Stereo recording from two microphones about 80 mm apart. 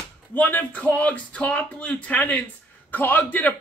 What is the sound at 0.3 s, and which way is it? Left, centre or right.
A man's voice, left.